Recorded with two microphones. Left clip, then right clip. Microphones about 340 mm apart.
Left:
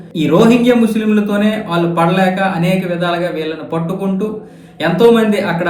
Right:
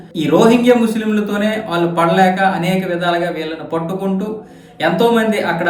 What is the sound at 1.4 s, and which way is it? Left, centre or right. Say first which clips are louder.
A woman's voice: left 1 dB; centre.